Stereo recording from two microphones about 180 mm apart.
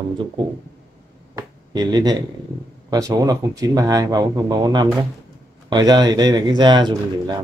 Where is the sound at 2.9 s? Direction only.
20° right (ahead or behind).